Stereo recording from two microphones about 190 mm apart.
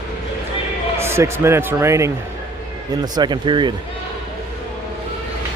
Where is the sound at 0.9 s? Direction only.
15° right (ahead or behind).